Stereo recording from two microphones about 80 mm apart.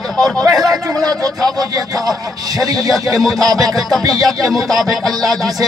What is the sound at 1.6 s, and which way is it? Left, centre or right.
Speech, right.